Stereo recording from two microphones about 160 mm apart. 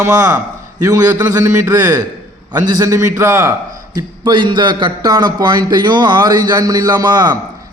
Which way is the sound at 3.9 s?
30° right (ahead or behind).